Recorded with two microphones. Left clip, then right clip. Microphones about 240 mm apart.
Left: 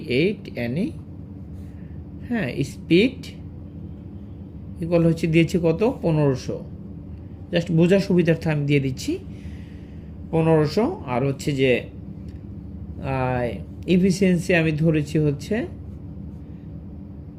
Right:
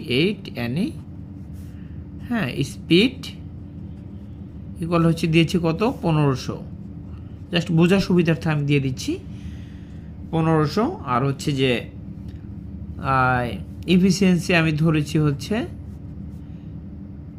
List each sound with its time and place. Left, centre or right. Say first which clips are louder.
0.0 s speech: even; centre
2.2 s speech: right 1 dB; centre
4.8 s speech: left 1 dB; centre
10.3 s speech: left 2 dB; centre
13.0 s speech: right 5 dB; right